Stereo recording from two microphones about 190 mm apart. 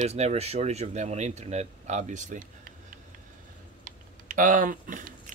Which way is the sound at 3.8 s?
45° right (ahead or behind).